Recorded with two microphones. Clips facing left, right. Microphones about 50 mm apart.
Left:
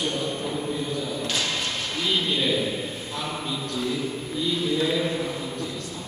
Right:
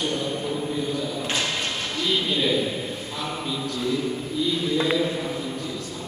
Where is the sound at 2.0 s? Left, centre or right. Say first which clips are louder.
Right 1 dB; centre.